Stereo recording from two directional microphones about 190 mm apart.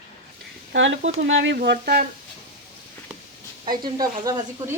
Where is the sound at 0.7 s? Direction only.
80° right.